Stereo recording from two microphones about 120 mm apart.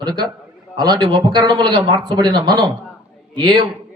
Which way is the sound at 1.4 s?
35° right (ahead or behind).